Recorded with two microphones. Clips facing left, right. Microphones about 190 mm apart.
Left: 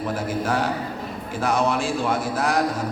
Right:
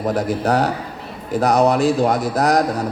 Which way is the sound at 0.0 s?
40° right (ahead or behind).